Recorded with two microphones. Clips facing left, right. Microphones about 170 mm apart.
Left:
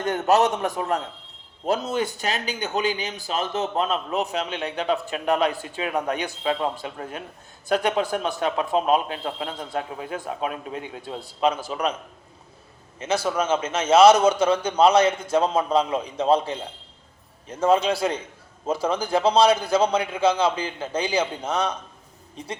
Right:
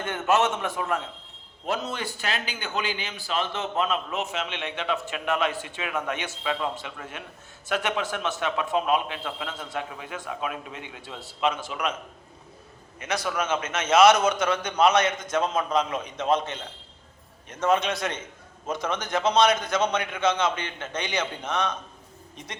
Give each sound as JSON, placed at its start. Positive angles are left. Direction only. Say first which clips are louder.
{"t": 0.0, "sound": "a man's voice", "louder": "left 4 dB", "side_deg": 40}
{"t": 13.0, "sound": "a man's voice", "louder": "left 5 dB", "side_deg": 30}